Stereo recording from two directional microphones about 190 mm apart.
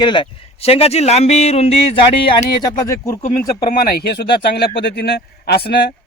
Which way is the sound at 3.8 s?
55° left (ahead or behind).